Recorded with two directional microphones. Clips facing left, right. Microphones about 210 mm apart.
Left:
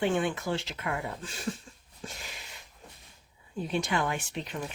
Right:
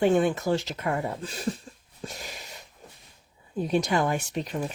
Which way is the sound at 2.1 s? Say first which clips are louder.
Right 5 dB; 40° right (ahead or behind).